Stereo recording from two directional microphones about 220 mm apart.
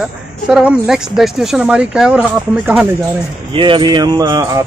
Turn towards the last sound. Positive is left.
turn(degrees=-15)  # may be behind; listen again after turning